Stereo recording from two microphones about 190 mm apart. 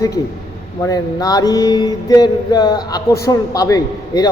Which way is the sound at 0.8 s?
20° left (ahead or behind).